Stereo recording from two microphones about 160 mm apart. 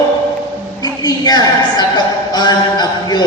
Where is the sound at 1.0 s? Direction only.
25° left (ahead or behind).